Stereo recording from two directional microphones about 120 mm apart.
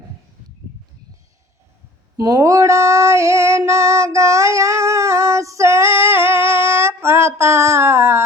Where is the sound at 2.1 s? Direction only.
30° right (ahead or behind).